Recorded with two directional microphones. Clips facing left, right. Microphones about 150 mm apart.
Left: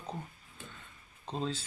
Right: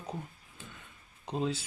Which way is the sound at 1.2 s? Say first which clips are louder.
Right 3 dB; 15° right (ahead or behind).